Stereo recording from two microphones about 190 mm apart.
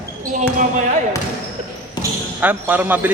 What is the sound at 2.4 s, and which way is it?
Speech, 10° right (ahead or behind).